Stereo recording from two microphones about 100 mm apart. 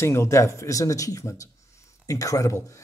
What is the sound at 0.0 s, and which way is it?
Speech, 30° left (ahead or behind).